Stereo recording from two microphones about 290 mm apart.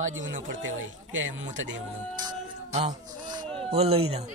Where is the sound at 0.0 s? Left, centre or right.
Right.